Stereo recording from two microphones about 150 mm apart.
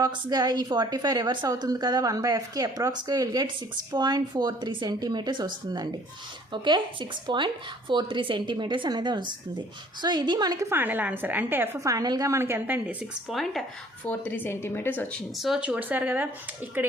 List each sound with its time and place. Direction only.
0.0 s speech: 25° right (ahead or behind); by 13.1 s 10° right (ahead or behind)
13.2 s speech: centre (ahead or behind)
15.4 s speech: 5° right (ahead or behind)